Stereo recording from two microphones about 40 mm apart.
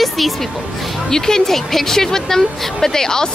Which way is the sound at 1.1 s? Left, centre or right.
Centre.